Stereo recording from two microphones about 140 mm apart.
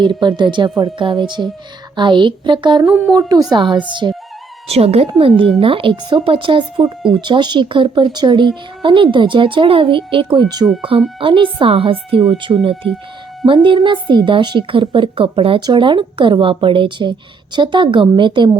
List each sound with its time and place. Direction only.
0.0 s a woman's voice: 35° right (ahead or behind)
2.8 s a sound: 5° right (ahead or behind)
3.5 s a woman's voice: 35° right (ahead or behind)
4.7 s a woman's voice: 45° right (ahead or behind)